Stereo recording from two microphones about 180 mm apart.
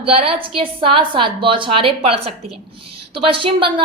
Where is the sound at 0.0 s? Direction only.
30° right (ahead or behind).